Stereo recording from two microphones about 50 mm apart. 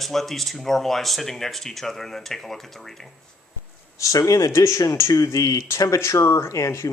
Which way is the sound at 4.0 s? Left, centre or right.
Left.